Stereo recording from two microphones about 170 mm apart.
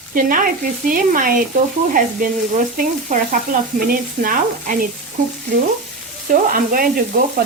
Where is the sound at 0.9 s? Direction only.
55° right (ahead or behind).